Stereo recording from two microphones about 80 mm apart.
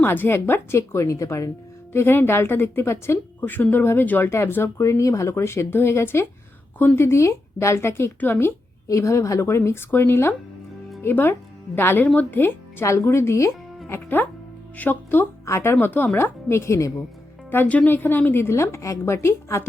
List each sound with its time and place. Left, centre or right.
0.0 s a woman's voice: left
1.9 s a woman's voice: left
8.9 s a woman's voice: left
13.8 s speech: left
15.4 s a woman's voice: left
17.5 s a woman's voice: left